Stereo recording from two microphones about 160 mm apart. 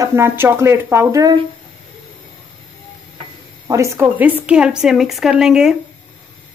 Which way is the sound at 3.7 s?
15° right (ahead or behind).